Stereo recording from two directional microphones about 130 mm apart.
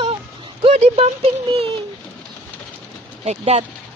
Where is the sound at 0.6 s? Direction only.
55° right (ahead or behind).